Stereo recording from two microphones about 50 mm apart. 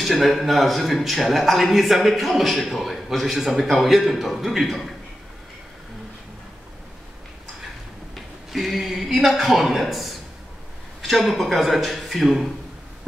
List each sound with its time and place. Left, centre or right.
0.0 s a man's voice: centre
8.5 s a man's voice: centre